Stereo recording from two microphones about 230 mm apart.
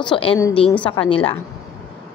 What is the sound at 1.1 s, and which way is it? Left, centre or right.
Speech, left.